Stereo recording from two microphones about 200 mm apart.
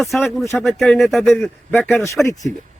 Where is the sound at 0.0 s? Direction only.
Centre (ahead or behind).